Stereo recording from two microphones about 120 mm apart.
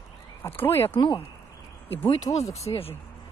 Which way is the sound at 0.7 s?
20° left (ahead or behind).